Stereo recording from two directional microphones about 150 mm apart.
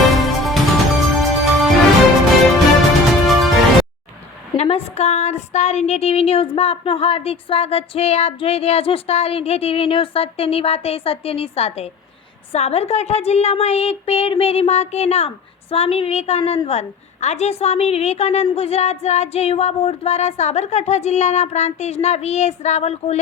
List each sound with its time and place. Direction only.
0.1 s music: centre (ahead or behind)
3.2 s music: centre (ahead or behind)
4.5 s speech: 45° left (ahead or behind)
12.5 s a sound: 45° left (ahead or behind)
15.7 s speech: 40° left (ahead or behind)
16.6 s a sound: 50° left (ahead or behind)